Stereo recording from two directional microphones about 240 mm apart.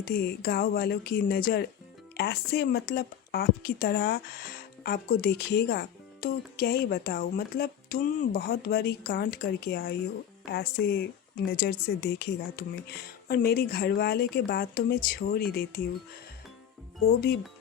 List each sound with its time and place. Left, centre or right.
0.0 s speech: left